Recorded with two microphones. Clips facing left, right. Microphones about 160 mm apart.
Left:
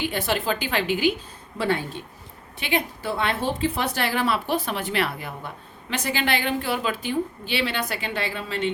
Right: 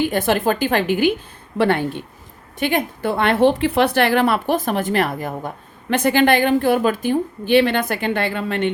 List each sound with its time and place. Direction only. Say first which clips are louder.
0.0 s a woman's voice: right 7 dB; 50° right (ahead or behind)
1.5 s speech: right 7 dB; 65° right (ahead or behind)
2.6 s a woman's voice: right 6 dB; 50° right (ahead or behind)